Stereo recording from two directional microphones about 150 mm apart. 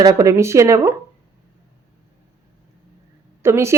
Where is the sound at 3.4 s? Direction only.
15° right (ahead or behind).